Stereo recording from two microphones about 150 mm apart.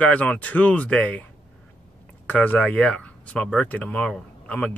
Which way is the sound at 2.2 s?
10° left (ahead or behind).